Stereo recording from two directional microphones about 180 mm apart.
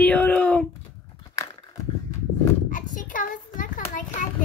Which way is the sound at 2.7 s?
45° left (ahead or behind).